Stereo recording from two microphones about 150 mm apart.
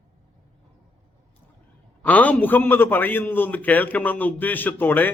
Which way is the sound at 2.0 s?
10° left (ahead or behind).